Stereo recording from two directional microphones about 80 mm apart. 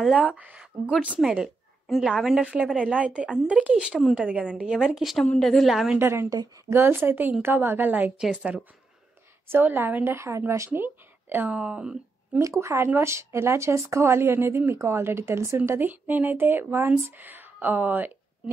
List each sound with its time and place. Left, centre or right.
0.0 s speech: centre
1.9 s a woman's voice: centre
5.9 s speech: right
6.3 s a woman's voice: right
6.7 s speech: right
8.2 s speech: centre
9.5 s speech: right
11.5 s speech: centre
12.4 s speech: right
15.9 s speech: right